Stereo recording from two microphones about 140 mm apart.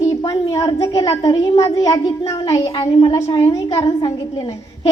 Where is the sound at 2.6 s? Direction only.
40° left (ahead or behind).